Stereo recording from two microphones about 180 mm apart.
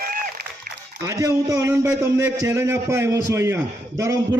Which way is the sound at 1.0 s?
20° right (ahead or behind).